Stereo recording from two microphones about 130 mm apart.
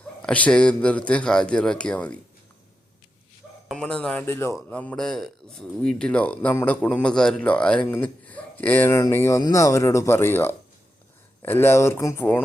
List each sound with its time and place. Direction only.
0.2 s speech: 10° left (ahead or behind)
3.7 s speech: 5° left (ahead or behind)